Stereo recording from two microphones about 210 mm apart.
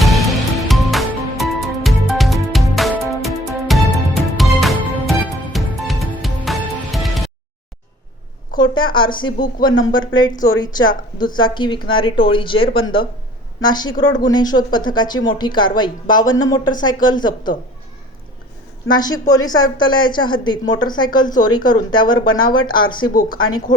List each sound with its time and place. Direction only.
0.0 s music: centre (ahead or behind)
8.5 s speech: 20° left (ahead or behind)
18.9 s speech: 20° left (ahead or behind)